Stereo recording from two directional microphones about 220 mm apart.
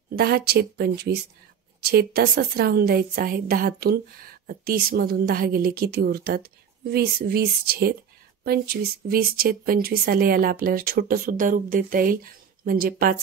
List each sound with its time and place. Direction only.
0.1 s a woman's voice: 45° right (ahead or behind)